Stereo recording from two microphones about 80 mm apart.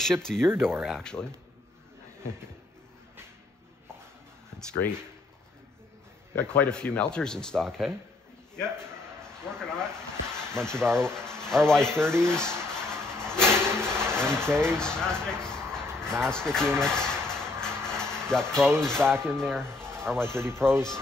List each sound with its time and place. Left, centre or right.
0.0 s speech: centre
0.5 s speech: right
0.9 s speech: centre
4.8 s speech: left
6.3 s speech: centre
8.8 s a sound: centre
11.0 s speech: centre
12.0 s speech: right
12.3 s music: centre
13.7 s a sound: centre
19.2 s speech: centre
20.2 s speech: right